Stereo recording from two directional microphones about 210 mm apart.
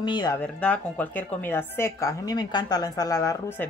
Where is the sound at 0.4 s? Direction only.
5° left (ahead or behind).